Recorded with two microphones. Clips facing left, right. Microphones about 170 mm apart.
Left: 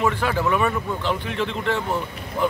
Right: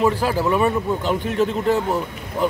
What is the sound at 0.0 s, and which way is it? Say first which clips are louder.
A man's voice: right 3 dB; 35° right (ahead or behind).